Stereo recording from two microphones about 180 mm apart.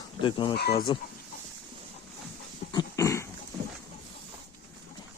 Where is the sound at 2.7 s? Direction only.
15° left (ahead or behind).